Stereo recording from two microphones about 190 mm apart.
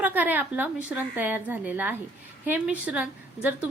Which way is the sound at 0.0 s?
10° right (ahead or behind).